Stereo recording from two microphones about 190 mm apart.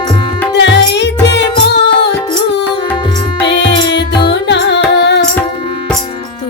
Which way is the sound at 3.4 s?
25° left (ahead or behind).